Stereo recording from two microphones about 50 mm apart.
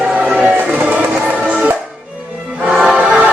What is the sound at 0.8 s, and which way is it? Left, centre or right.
Music, right.